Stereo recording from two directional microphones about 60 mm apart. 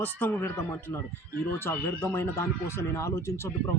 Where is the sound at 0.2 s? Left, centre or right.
Left.